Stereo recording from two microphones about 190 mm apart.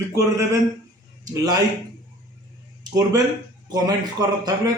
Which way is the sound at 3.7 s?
20° right (ahead or behind).